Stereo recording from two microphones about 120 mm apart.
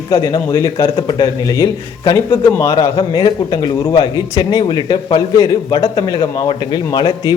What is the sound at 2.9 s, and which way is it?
A man's voice, 40° left (ahead or behind).